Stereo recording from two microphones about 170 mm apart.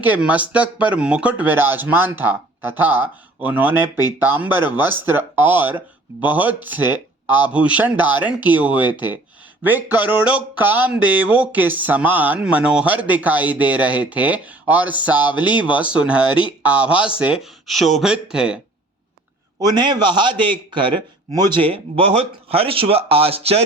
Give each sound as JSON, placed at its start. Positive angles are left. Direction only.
{"t": 0.0, "sound": "speech", "side_deg": -10}
{"t": 19.5, "sound": "a man's voice", "side_deg": -25}